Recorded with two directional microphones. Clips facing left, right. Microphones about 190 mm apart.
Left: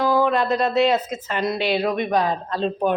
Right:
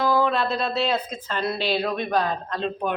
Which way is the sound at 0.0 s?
10° left (ahead or behind).